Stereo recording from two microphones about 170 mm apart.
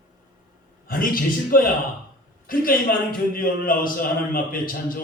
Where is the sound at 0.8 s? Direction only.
55° left (ahead or behind).